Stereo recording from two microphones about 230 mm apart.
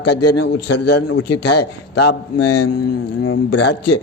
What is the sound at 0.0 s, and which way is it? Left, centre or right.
Speech, left.